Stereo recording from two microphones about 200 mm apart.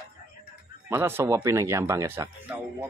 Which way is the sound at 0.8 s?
10° right (ahead or behind).